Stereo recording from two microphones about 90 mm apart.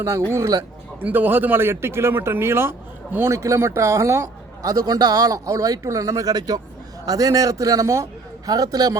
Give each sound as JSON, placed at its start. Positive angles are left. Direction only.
{"t": 0.3, "sound": "speech", "side_deg": -35}
{"t": 1.0, "sound": "speech", "side_deg": -20}
{"t": 3.3, "sound": "a man's voice", "side_deg": -35}